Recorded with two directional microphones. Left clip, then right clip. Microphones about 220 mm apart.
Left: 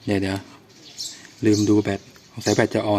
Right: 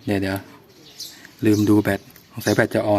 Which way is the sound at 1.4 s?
15° right (ahead or behind).